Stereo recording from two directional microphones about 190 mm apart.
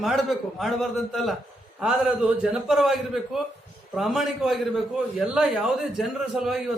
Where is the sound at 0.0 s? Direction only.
Centre (ahead or behind).